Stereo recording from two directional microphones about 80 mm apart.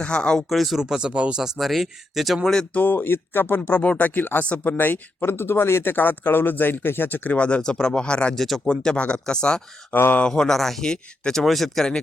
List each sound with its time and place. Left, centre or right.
0.0 s speech: centre
1.5 s speech: centre
2.7 s speech: left
9.9 s speech: left; by 11.9 s centre